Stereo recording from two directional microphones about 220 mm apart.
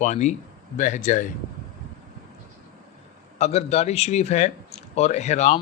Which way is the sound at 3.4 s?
30° left (ahead or behind).